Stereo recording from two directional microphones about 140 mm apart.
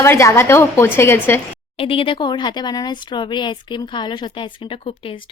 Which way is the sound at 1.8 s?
40° left (ahead or behind).